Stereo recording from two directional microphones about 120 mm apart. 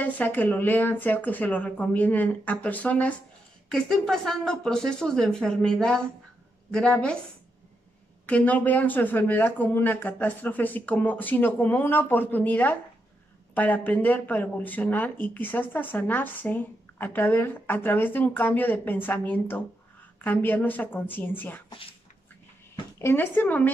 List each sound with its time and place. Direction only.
0.0 s a woman's voice: 15° left (ahead or behind)
8.3 s speech: 10° left (ahead or behind)
22.9 s speech: 20° left (ahead or behind)